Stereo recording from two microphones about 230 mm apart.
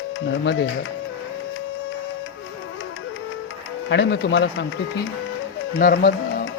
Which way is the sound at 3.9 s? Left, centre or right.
Left.